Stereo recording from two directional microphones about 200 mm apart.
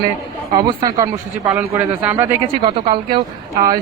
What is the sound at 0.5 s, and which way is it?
Speech, 20° right (ahead or behind).